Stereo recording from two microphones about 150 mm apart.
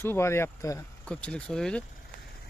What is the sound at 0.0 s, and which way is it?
Speech, 15° left (ahead or behind).